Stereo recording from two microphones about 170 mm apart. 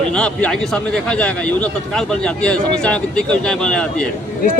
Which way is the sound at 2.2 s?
5° left (ahead or behind).